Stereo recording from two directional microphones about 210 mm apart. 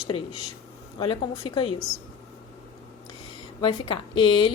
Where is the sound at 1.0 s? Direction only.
20° left (ahead or behind).